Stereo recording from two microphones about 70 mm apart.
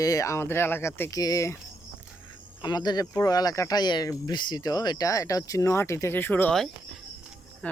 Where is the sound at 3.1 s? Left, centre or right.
Left.